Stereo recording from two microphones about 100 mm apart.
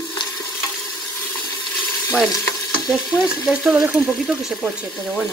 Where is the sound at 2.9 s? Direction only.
5° right (ahead or behind).